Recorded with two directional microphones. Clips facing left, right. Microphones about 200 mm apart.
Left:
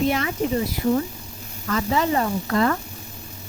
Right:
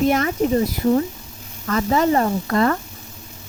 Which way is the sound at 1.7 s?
45° right (ahead or behind).